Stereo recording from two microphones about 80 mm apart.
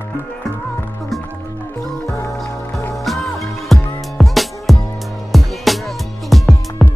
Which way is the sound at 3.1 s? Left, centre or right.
Centre.